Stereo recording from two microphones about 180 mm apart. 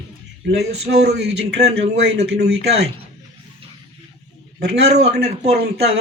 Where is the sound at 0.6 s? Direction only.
65° right (ahead or behind).